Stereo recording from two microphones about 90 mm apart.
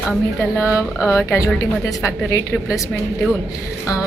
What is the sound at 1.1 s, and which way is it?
Speech, 35° left (ahead or behind).